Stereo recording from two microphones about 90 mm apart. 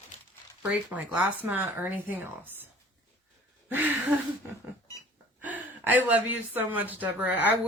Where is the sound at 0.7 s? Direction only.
15° right (ahead or behind).